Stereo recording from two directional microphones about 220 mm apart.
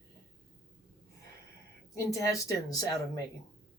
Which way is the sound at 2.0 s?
15° left (ahead or behind).